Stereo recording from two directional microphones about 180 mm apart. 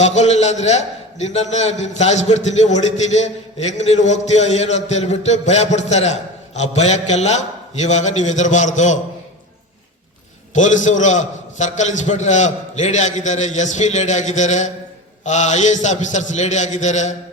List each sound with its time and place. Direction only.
0.0 s a man's voice: 40° left (ahead or behind)
10.5 s a man's voice: 45° left (ahead or behind)